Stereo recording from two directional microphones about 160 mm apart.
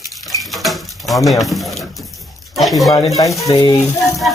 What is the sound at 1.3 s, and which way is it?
Speech, centre (ahead or behind).